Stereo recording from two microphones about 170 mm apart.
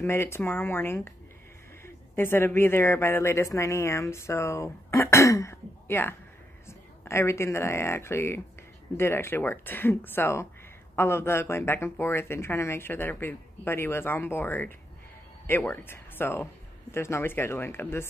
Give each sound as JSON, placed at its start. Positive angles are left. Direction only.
{"t": 0.0, "sound": "speech", "side_deg": 15}
{"t": 2.1, "sound": "speech", "side_deg": 15}